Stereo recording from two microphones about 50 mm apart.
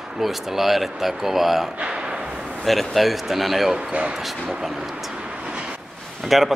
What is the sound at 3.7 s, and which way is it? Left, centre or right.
Speech, centre.